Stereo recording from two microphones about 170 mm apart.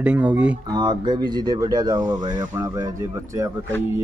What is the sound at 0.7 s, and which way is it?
Speech, 25° right (ahead or behind).